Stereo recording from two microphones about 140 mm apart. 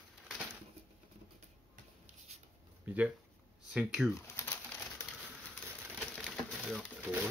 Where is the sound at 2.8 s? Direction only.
10° right (ahead or behind).